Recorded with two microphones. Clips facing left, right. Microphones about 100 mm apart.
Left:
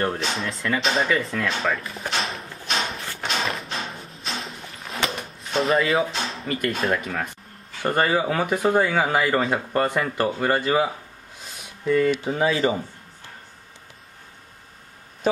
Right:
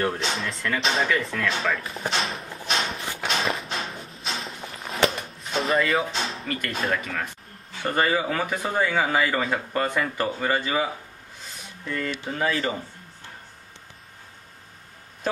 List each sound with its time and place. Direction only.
0.0 s speech: 5° left (ahead or behind)
2.9 s a sound: centre (ahead or behind)
5.6 s speech: centre (ahead or behind); by 12.7 s 20° left (ahead or behind)